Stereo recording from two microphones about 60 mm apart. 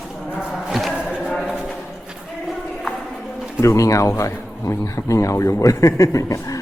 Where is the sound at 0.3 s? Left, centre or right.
Centre.